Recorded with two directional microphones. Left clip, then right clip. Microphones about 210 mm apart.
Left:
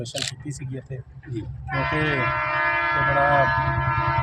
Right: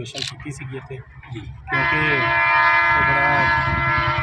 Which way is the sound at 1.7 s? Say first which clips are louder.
Right 5 dB; 35° right (ahead or behind).